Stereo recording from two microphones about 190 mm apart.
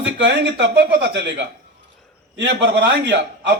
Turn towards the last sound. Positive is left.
turn(degrees=-65)  # may be behind; listen again after turning